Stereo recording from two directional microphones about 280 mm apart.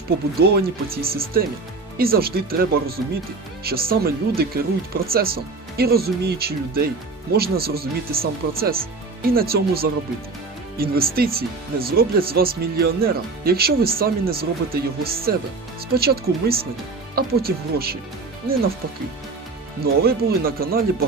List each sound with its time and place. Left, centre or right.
0.3 s speech: right
19.8 s speech: right